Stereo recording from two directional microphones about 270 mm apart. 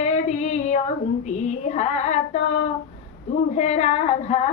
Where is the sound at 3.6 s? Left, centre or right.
Left.